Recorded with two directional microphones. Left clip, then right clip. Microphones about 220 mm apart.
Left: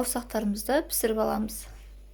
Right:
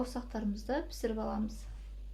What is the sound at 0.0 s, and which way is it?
Speech, 45° left (ahead or behind).